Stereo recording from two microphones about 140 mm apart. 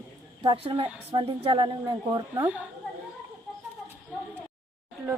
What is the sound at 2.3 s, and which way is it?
Speech, 15° right (ahead or behind).